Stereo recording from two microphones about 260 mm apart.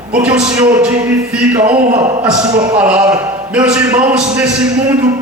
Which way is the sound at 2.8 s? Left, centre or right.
Centre.